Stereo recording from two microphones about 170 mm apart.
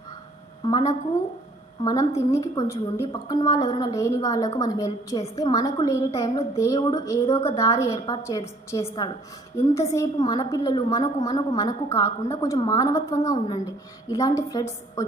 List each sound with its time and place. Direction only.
0.6 s a woman's voice: 25° left (ahead or behind)